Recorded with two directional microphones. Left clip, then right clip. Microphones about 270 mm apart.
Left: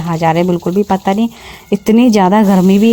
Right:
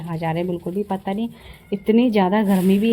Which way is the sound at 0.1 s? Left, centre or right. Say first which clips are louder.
Left 12 dB; left.